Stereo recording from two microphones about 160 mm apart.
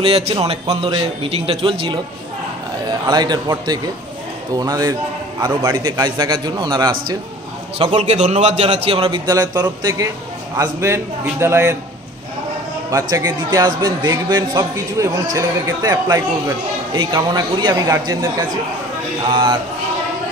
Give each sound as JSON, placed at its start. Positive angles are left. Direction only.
{"t": 0.0, "sound": "a man's voice", "side_deg": -40}
{"t": 3.1, "sound": "a man's voice", "side_deg": -25}
{"t": 7.8, "sound": "a man's voice", "side_deg": -40}
{"t": 9.3, "sound": "a man's voice", "side_deg": -20}
{"t": 12.9, "sound": "a man's voice", "side_deg": -20}
{"t": 19.2, "sound": "a sound", "side_deg": -30}